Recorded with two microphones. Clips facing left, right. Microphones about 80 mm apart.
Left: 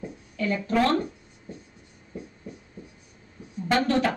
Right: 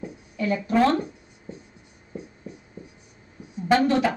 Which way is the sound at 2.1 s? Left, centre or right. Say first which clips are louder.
Right 1 dB; centre.